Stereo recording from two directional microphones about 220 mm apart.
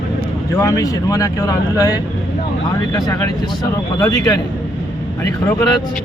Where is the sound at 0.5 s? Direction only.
15° left (ahead or behind).